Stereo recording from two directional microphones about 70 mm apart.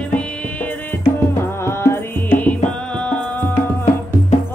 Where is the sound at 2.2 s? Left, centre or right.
Left.